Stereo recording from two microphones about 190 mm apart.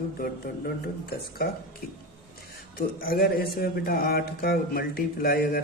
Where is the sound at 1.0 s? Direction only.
55° left (ahead or behind).